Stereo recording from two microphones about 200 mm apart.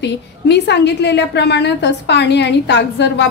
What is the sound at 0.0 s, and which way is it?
A woman's voice, 60° left (ahead or behind).